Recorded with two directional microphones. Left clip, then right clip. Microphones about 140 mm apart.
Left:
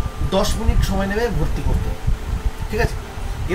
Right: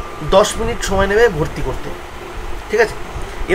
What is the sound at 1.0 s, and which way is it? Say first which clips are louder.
Speech: right 10 dB; 20° right (ahead or behind).